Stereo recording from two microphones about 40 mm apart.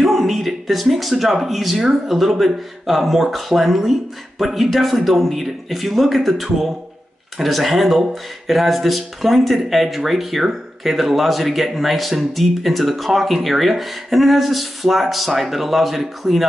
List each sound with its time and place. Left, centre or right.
0.0 s speech: centre